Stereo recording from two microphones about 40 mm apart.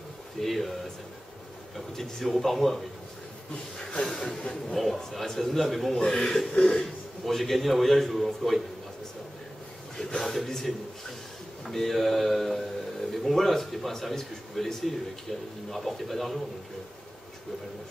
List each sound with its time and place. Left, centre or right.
0.4 s a man's voice: centre
2.0 s a man's voice: centre
3.7 s a sound: centre
4.7 s a man's voice: centre
5.9 s a man's voice: centre
9.9 s a man's voice: centre
11.7 s a man's voice: centre